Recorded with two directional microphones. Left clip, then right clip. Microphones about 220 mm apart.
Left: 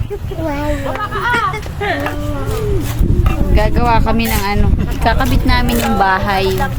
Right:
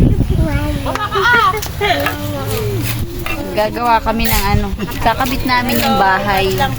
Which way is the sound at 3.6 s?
10° left (ahead or behind).